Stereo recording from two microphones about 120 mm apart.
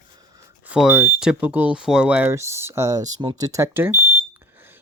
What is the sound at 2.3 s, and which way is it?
Speech, 25° right (ahead or behind).